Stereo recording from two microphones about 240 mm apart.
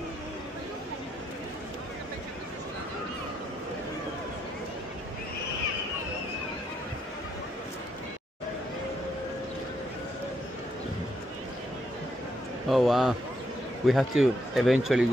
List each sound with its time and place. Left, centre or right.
12.6 s speech: centre